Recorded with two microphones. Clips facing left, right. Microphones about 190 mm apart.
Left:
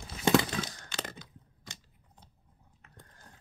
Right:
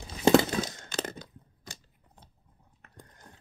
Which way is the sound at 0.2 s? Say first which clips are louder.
Right 5 dB; 35° right (ahead or behind).